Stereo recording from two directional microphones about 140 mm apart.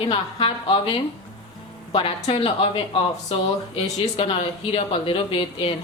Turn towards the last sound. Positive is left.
turn(degrees=40)  # may be behind; listen again after turning